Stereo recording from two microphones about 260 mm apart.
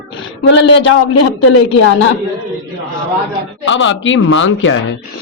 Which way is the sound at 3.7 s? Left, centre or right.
Left.